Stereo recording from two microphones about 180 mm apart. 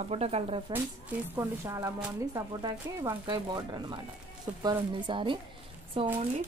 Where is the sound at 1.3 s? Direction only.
15° right (ahead or behind).